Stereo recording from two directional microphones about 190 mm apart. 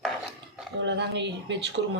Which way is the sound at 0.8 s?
65° right (ahead or behind).